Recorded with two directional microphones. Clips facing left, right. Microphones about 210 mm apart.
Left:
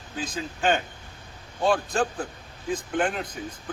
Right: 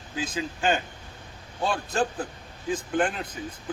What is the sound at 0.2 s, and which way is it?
A man's voice, centre (ahead or behind).